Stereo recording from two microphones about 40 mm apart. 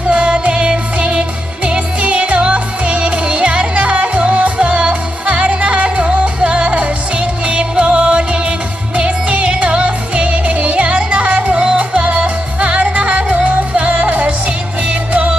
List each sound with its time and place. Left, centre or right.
0.1 s music: right